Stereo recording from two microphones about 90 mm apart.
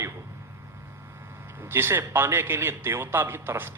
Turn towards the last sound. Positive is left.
turn(degrees=-25)  # may be behind; listen again after turning